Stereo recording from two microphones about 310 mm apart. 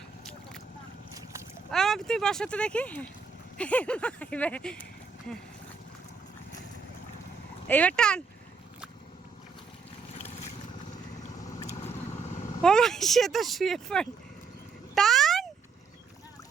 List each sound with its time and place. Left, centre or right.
1.7 s speech: centre
7.7 s speech: centre
11.6 s vehicle: left
12.6 s speech: centre
14.9 s a sound: centre